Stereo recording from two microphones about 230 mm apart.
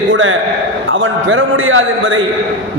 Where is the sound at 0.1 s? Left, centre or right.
Right.